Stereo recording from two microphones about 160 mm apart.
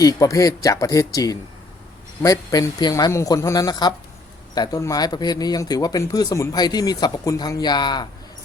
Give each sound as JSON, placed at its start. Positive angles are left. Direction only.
{"t": 0.0, "sound": "speech", "side_deg": 20}